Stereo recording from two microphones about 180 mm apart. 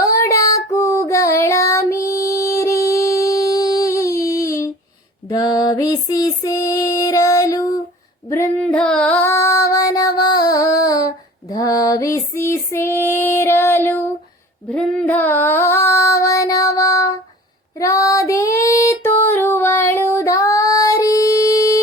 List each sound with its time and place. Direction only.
0.0 s child singing: 20° left (ahead or behind)
5.3 s female singing: 20° left (ahead or behind)